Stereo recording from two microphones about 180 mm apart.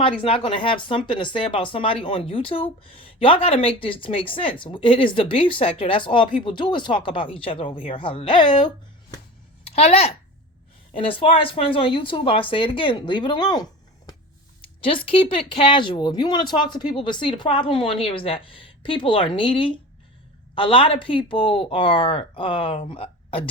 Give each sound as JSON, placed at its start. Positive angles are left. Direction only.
{"t": 0.0, "sound": "speech", "side_deg": 30}
{"t": 9.7, "sound": "a child's voice", "side_deg": 35}
{"t": 14.8, "sound": "speech", "side_deg": 30}